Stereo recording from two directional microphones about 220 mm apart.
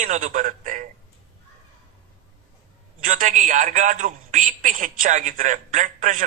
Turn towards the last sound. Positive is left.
turn(degrees=-35)  # may be behind; listen again after turning